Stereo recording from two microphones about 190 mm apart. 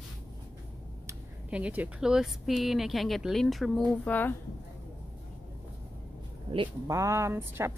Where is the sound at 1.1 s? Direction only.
5° right (ahead or behind).